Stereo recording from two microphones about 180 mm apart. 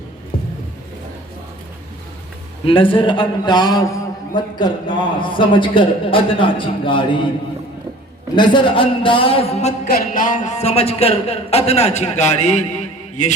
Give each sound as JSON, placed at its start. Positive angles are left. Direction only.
{"t": 2.6, "sound": "a man's voice", "side_deg": 30}
{"t": 8.4, "sound": "a man's voice", "side_deg": 25}